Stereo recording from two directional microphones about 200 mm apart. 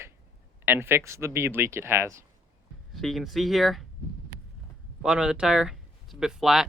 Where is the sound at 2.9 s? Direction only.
Centre (ahead or behind).